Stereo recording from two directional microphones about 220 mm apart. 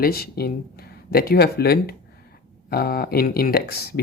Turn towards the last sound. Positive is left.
turn(degrees=45)  # may be behind; listen again after turning